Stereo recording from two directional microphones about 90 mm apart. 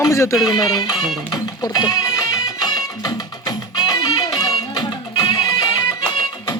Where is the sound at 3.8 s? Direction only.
45° left (ahead or behind).